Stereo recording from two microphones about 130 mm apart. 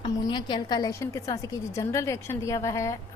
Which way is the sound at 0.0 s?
35° left (ahead or behind).